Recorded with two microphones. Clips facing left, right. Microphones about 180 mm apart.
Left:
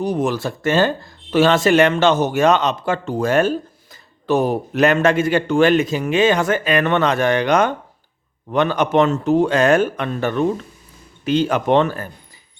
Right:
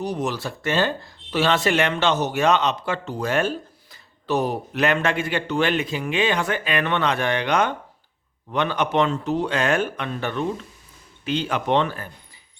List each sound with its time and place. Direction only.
0.0 s speech: 50° left (ahead or behind)